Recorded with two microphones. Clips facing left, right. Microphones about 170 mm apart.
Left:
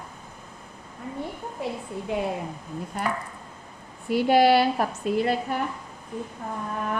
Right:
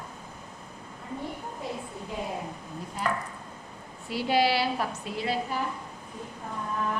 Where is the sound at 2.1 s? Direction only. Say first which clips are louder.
Left 6 dB; 70° left (ahead or behind); by 5.6 s 50° left (ahead or behind).